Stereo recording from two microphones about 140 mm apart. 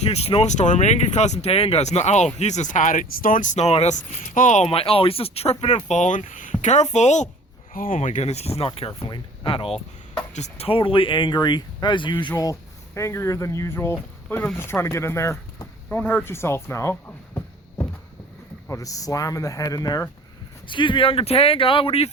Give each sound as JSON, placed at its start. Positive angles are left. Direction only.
{"t": 0.1, "sound": "speech", "side_deg": 45}
{"t": 4.6, "sound": "speech", "side_deg": 45}
{"t": 5.9, "sound": "speech", "side_deg": 60}
{"t": 7.7, "sound": "speech", "side_deg": 80}
{"t": 8.9, "sound": "speech", "side_deg": 30}
{"t": 10.3, "sound": "speech", "side_deg": 50}
{"t": 12.4, "sound": "speech", "side_deg": 20}